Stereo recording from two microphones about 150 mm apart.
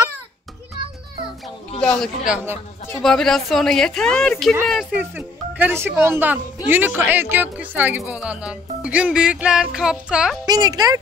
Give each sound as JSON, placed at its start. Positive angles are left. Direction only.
{"t": 1.8, "sound": "music", "side_deg": 5}
{"t": 2.3, "sound": "speech", "side_deg": -15}
{"t": 3.0, "sound": "music", "side_deg": 5}
{"t": 4.9, "sound": "speech", "side_deg": -10}
{"t": 8.0, "sound": "music", "side_deg": -5}
{"t": 10.4, "sound": "a woman's voice", "side_deg": -25}